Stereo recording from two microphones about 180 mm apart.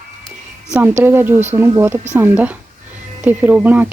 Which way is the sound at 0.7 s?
10° right (ahead or behind).